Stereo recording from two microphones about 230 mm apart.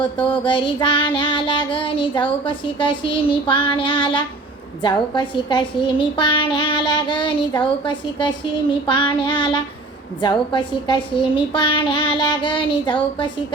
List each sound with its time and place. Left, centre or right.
0.4 s a child's voice: left